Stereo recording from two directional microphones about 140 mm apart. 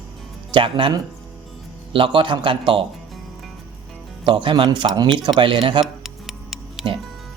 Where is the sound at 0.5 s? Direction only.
35° right (ahead or behind).